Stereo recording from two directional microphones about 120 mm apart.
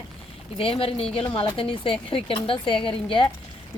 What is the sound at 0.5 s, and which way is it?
Speech, 50° left (ahead or behind).